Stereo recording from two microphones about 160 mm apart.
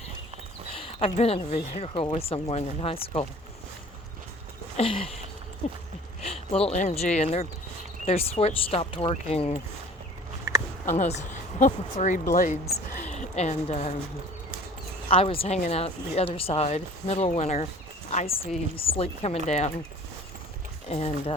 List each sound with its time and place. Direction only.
0.7 s speech: 40° left (ahead or behind)
4.8 s speech: 35° left (ahead or behind)
10.5 s a sound: 25° right (ahead or behind)
10.8 s speech: 45° left (ahead or behind)
13.1 s a woman's voice: 45° left (ahead or behind)
15.1 s speech: 35° left (ahead or behind)
20.9 s speech: 45° left (ahead or behind)